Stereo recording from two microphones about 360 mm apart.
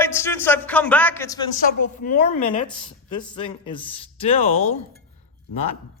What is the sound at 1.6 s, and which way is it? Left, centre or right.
A woman's voice, left.